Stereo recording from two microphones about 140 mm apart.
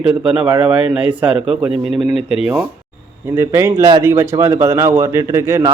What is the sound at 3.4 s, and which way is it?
A man's voice, 15° right (ahead or behind).